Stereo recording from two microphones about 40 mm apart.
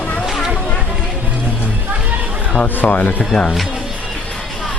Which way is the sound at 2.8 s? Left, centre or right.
Left.